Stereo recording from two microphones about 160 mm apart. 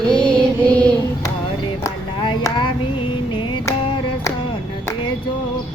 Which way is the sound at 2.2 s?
30° left (ahead or behind).